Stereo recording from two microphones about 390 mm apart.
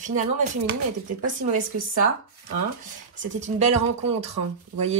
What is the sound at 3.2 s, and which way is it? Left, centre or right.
Speech, centre.